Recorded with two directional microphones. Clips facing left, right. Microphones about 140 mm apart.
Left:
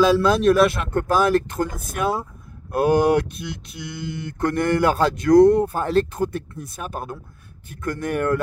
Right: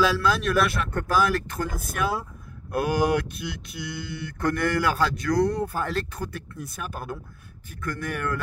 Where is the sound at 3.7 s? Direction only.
25° left (ahead or behind).